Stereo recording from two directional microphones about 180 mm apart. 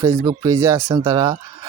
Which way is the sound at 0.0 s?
15° right (ahead or behind).